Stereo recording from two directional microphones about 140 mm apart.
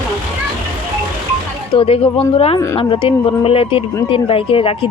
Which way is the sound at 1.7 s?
45° left (ahead or behind).